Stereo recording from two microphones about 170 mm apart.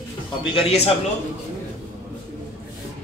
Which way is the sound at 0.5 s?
35° left (ahead or behind).